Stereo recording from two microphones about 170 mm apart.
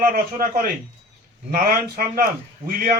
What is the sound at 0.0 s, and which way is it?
A man's voice, 60° right (ahead or behind).